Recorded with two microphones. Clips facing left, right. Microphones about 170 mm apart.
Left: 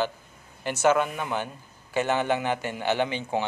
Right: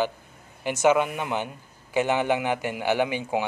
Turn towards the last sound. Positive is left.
turn(degrees=-10)  # may be behind; listen again after turning